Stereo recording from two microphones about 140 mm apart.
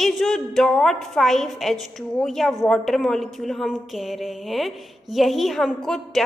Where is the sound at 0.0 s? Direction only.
Centre (ahead or behind).